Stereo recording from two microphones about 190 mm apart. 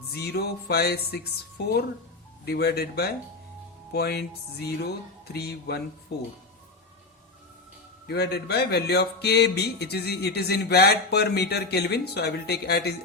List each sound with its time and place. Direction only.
0.3 s speech: 55° left (ahead or behind)
5.3 s speech: 60° left (ahead or behind)
8.0 s speech: 60° left (ahead or behind)